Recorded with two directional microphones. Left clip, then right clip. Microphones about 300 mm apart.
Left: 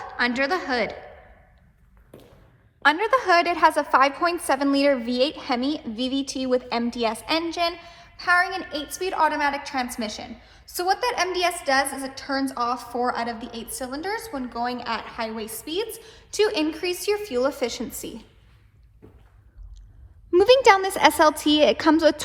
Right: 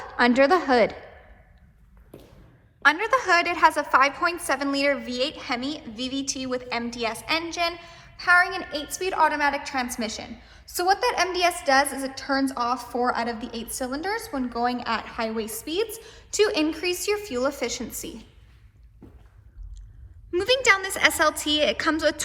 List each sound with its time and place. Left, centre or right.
0.0 s a woman's voice: centre
2.8 s a woman's voice: centre
20.3 s a woman's voice: centre